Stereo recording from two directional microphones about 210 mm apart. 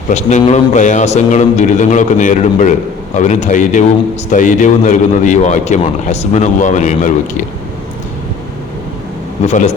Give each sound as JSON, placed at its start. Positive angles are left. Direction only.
{"t": 0.1, "sound": "speech", "side_deg": 35}
{"t": 9.4, "sound": "speech", "side_deg": 35}